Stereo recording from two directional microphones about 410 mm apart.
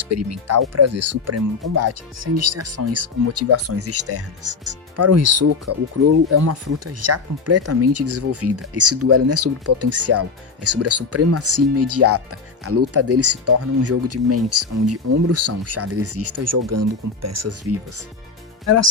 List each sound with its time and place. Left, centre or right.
0.0 s speech: right